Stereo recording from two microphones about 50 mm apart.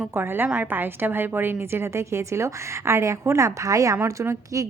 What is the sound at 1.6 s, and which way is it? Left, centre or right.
A woman's voice, right.